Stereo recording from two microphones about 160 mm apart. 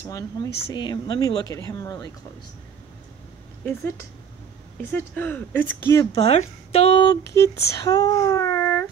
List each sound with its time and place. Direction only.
0.0 s speech: 20° left (ahead or behind)
4.9 s speech: 10° left (ahead or behind)
6.1 s speech: 40° left (ahead or behind)
7.3 s speech: 20° left (ahead or behind)